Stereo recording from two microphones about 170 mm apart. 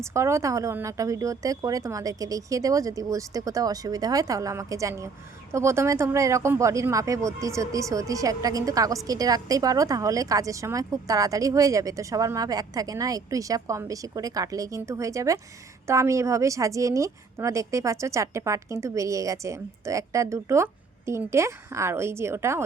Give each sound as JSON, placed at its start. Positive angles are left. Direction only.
{"t": 0.0, "sound": "a woman's voice", "side_deg": -15}